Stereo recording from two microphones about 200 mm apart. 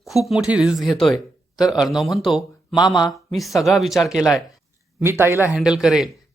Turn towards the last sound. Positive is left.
turn(degrees=-5)  # may be behind; listen again after turning